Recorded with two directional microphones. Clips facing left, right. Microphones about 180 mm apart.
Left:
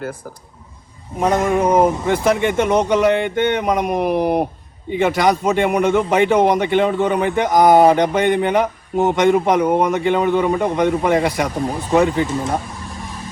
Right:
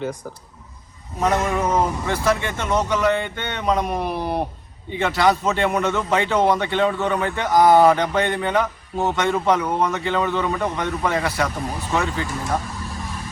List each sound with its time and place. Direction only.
1.2 s speech: 30° left (ahead or behind)
1.7 s speech: 20° left (ahead or behind)